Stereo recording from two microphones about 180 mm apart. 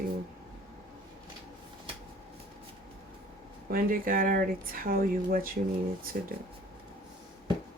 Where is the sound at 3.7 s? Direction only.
55° right (ahead or behind).